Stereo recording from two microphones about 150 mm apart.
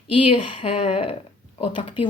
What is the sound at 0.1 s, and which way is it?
Speech, 35° left (ahead or behind).